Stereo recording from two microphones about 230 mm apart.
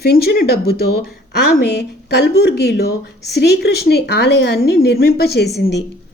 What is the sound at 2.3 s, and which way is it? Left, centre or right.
Speech, left.